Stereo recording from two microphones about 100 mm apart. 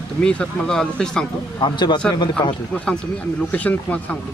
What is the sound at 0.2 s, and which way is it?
Speech, 10° left (ahead or behind).